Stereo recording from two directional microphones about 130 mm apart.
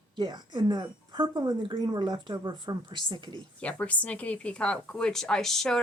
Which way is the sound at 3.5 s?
10° left (ahead or behind).